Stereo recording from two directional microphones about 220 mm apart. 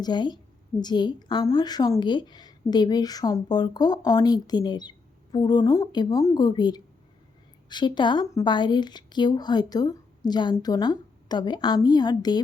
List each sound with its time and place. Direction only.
0.0 s a woman's voice: 20° left (ahead or behind)